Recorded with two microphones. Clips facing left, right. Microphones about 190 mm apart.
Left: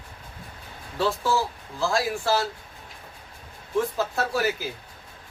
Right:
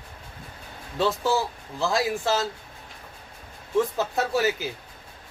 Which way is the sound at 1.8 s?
20° right (ahead or behind).